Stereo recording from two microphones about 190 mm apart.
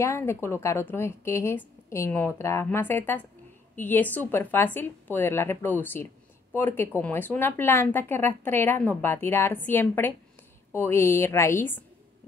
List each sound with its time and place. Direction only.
0.0 s speech: 15° left (ahead or behind)